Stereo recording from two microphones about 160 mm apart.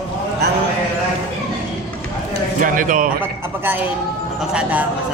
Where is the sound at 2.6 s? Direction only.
55° right (ahead or behind).